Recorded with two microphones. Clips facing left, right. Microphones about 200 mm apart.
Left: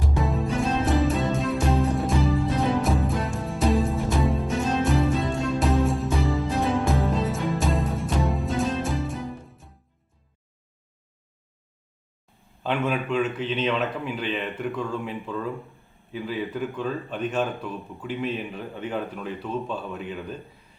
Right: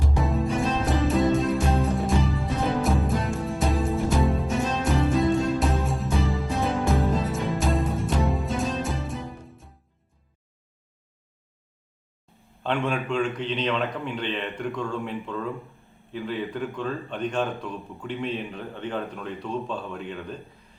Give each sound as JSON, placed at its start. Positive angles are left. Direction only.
{"t": 0.2, "sound": "music", "side_deg": 0}
{"t": 12.6, "sound": "a man's voice", "side_deg": 5}